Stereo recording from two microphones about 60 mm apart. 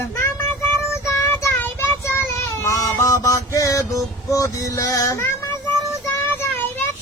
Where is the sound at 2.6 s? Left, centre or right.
Left.